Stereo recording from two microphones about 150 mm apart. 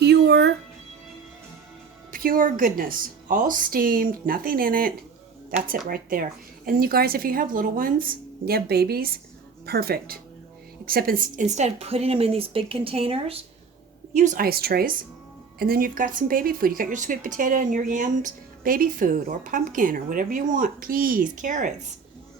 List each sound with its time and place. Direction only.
0.0 s music: 90° right
2.1 s a woman's voice: 70° right (ahead or behind); by 10.2 s 90° right
10.8 s a woman's voice: 80° right
11.4 s speech: 50° right (ahead or behind)
14.1 s a woman's voice: 50° right (ahead or behind)
14.3 s speech: 90° right; by 21.7 s 60° right (ahead or behind)